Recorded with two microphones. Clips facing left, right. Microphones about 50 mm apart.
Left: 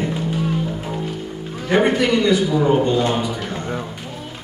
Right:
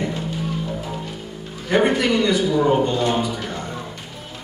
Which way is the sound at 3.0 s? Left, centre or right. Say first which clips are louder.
Left 1 dB; left.